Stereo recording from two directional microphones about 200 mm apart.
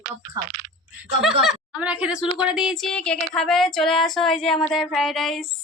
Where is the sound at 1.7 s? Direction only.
5° right (ahead or behind).